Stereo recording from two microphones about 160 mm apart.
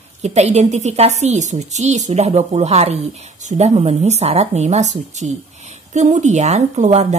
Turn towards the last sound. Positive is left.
turn(degrees=-45)  # may be behind; listen again after turning